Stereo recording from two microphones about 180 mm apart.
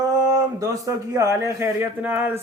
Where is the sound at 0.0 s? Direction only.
20° right (ahead or behind).